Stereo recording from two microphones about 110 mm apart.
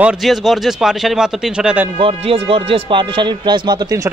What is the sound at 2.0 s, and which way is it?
Speech, 60° right (ahead or behind).